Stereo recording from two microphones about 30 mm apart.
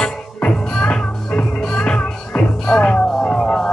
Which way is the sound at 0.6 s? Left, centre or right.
Left.